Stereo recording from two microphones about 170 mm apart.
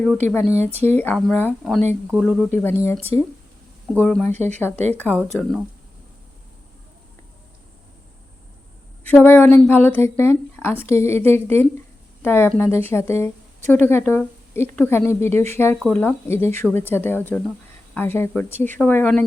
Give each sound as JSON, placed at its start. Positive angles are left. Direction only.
{"t": 0.3, "sound": "speech", "side_deg": 5}
{"t": 0.6, "sound": "speech", "side_deg": -40}
{"t": 0.9, "sound": "speech", "side_deg": 10}
{"t": 2.5, "sound": "speech", "side_deg": 10}
{"t": 4.3, "sound": "speech", "side_deg": -40}
{"t": 4.9, "sound": "speech", "side_deg": 10}
{"t": 9.0, "sound": "speech", "side_deg": 10}